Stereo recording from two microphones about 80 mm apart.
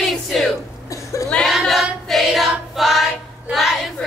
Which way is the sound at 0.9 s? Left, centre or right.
Left.